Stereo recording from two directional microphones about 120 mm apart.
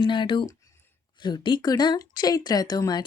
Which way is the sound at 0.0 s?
40° left (ahead or behind).